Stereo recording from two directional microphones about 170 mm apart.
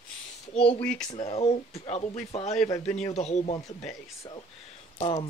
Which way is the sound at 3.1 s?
40° left (ahead or behind).